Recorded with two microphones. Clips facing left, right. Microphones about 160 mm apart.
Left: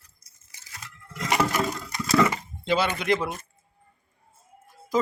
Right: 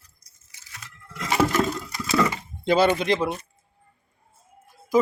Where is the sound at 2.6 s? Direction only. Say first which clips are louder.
Right 6 dB; 40° right (ahead or behind).